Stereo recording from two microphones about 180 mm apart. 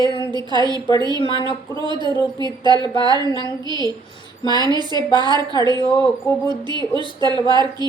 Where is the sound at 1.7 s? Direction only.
25° right (ahead or behind).